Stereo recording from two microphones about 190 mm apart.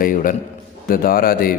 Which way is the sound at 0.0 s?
45° left (ahead or behind).